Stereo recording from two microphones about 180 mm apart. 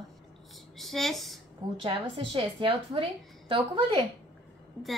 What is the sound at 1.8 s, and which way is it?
Speech, 30° right (ahead or behind).